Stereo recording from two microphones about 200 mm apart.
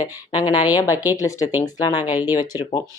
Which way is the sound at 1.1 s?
15° left (ahead or behind).